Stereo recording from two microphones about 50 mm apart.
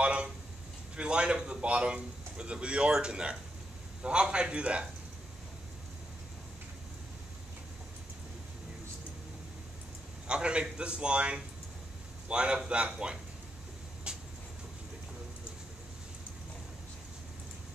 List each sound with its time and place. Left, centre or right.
0.0 s a sound: right
0.9 s speech: right
10.2 s speech: right
14.1 s vehicle: centre